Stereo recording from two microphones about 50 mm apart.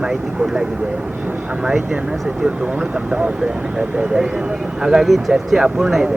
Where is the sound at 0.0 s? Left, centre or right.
Centre.